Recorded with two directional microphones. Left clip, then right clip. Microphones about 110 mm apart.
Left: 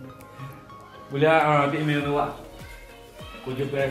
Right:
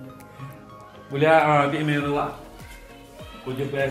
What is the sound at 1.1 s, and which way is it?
A man's voice, 30° right (ahead or behind).